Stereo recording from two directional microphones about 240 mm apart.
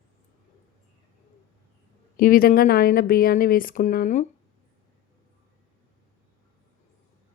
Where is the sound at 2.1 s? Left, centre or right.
Left.